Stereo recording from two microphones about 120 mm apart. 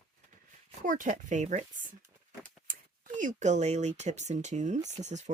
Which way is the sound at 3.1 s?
90° right.